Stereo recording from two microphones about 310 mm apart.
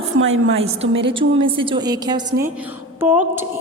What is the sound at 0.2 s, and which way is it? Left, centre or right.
Speech, right.